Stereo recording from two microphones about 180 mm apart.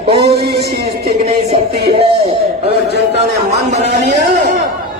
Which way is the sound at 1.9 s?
35° right (ahead or behind).